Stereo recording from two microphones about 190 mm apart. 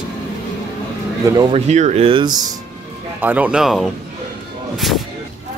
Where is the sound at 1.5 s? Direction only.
35° right (ahead or behind); by 2.5 s 20° right (ahead or behind).